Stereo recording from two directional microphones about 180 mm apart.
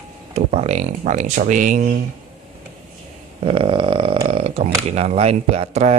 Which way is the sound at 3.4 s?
30° right (ahead or behind).